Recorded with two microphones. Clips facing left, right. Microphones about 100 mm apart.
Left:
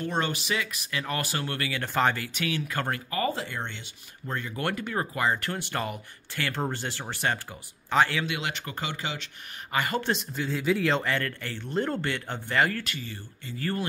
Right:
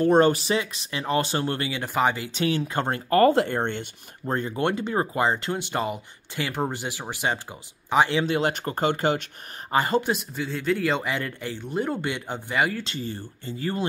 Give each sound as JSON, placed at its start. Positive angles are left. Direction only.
{"t": 0.0, "sound": "speech", "side_deg": -40}
{"t": 1.8, "sound": "speech", "side_deg": -15}
{"t": 2.3, "sound": "speech", "side_deg": -30}
{"t": 3.1, "sound": "speech", "side_deg": -65}
{"t": 4.3, "sound": "speech", "side_deg": -35}
{"t": 8.3, "sound": "speech", "side_deg": -40}
{"t": 9.7, "sound": "speech", "side_deg": -30}
{"t": 10.0, "sound": "speech", "side_deg": -5}
{"t": 11.1, "sound": "speech", "side_deg": -15}
{"t": 12.8, "sound": "speech", "side_deg": -30}
{"t": 13.6, "sound": "speech", "side_deg": -20}